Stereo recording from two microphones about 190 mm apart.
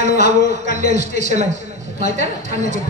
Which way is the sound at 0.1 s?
50° left (ahead or behind).